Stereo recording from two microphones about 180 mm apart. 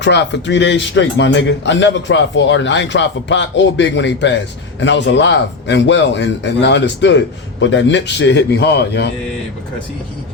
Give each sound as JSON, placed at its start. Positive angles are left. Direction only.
{"t": 0.0, "sound": "a man's voice", "side_deg": 75}
{"t": 7.6, "sound": "speech", "side_deg": 90}